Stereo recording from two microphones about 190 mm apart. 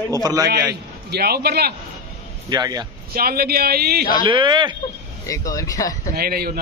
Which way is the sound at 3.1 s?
50° right (ahead or behind).